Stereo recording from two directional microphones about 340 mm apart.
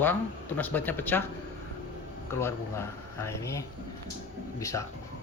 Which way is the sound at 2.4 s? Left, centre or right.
Centre.